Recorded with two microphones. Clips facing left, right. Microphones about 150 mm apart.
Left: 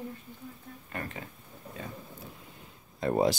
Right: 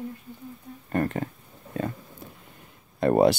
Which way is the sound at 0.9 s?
50° right (ahead or behind).